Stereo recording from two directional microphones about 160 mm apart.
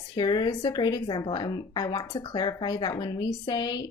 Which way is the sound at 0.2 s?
25° left (ahead or behind).